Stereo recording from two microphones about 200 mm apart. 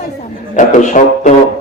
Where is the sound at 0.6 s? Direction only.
40° left (ahead or behind).